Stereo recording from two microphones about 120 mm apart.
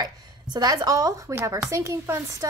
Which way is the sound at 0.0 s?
35° right (ahead or behind).